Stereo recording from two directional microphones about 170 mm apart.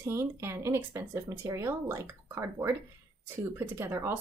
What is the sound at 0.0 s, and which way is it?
A woman's voice, 15° right (ahead or behind).